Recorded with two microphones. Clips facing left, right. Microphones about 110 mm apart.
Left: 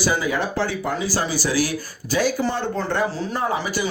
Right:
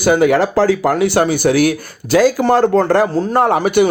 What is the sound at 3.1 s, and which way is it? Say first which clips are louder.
Speech: right 10 dB; 65° right (ahead or behind).